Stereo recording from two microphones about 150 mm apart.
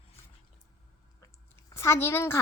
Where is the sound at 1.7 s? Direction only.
20° left (ahead or behind).